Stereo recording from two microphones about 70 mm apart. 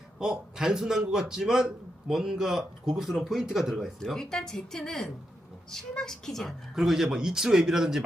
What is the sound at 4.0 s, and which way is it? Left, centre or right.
A woman's voice, centre.